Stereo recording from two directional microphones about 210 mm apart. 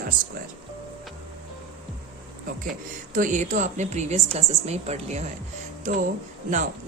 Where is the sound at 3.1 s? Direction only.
35° right (ahead or behind).